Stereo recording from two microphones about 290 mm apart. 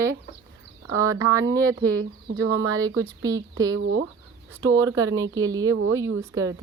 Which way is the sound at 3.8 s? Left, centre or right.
Right.